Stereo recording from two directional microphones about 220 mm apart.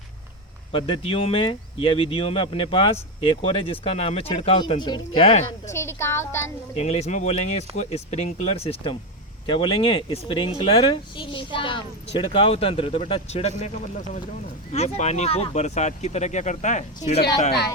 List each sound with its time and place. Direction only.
0.7 s speech: 25° left (ahead or behind)
5.7 s a woman's voice: 10° left (ahead or behind)
6.7 s speech: 30° left (ahead or behind)